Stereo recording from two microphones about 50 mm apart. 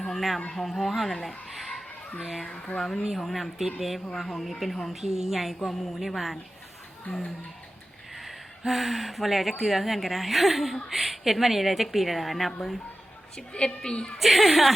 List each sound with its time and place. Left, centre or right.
0.1 s a sound: centre
0.5 s a woman's voice: centre
1.5 s a sound: centre
2.4 s speech: centre
2.7 s a woman's voice: centre
8.1 s a woman's voice: centre
13.5 s a woman's voice: centre
14.2 s a woman's voice: centre